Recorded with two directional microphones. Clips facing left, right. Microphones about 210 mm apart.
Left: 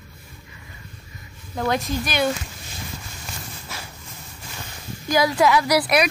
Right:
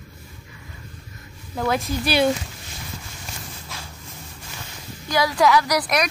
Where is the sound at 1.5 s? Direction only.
Centre (ahead or behind).